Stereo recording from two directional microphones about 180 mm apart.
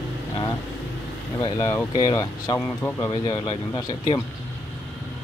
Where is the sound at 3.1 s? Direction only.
25° left (ahead or behind).